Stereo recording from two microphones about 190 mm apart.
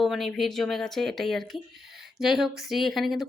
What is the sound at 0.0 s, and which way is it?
A woman's voice, centre (ahead or behind).